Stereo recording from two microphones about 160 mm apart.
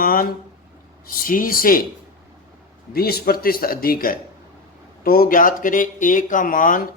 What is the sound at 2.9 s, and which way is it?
A man's voice, 75° left (ahead or behind).